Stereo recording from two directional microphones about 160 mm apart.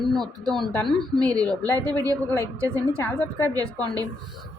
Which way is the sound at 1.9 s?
25° right (ahead or behind).